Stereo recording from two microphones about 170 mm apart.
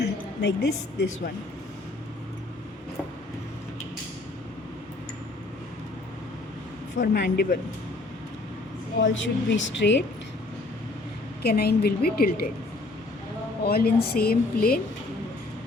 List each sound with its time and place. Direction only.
0.0 s a woman's voice: 80° left
6.9 s speech: 50° left (ahead or behind)
7.2 s speech: 65° left (ahead or behind)
9.0 s a woman's voice: 90° left
11.4 s speech: 65° left (ahead or behind)
13.7 s speech: 65° left (ahead or behind)